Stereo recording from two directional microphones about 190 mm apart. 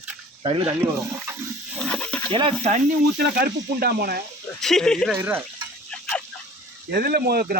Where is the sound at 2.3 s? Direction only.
25° right (ahead or behind).